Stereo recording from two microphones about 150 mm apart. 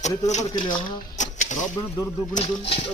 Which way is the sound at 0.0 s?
50° left (ahead or behind).